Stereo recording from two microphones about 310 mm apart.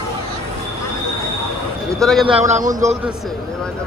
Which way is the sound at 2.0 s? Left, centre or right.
Centre.